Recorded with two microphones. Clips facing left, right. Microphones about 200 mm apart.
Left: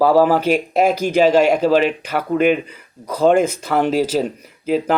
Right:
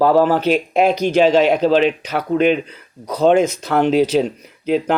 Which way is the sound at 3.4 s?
55° left (ahead or behind).